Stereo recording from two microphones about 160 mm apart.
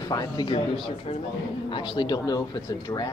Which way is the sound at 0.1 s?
25° left (ahead or behind).